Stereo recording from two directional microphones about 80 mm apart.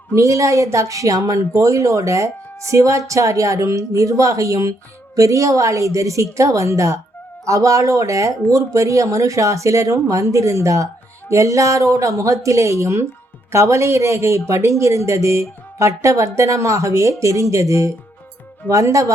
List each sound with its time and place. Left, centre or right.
0.1 s speech: right